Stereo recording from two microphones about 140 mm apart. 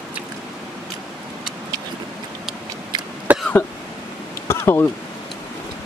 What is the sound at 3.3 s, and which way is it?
Cough, 10° right (ahead or behind).